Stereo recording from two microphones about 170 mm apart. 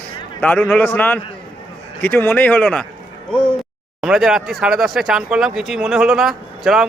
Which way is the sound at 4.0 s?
5° right (ahead or behind).